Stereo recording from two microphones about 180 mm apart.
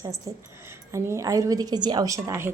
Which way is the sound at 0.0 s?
20° right (ahead or behind).